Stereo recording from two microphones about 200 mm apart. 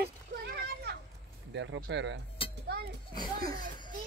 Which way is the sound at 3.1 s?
20° left (ahead or behind).